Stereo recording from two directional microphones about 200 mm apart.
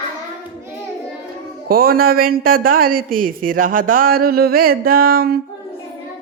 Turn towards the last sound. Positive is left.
turn(degrees=-50)  # may be behind; listen again after turning